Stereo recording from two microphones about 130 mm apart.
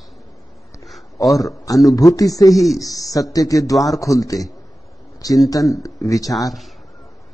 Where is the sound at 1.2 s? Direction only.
25° left (ahead or behind).